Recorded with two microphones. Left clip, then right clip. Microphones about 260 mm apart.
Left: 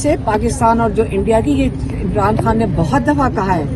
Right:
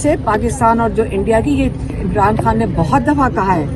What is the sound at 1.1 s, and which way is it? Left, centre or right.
Speech, centre.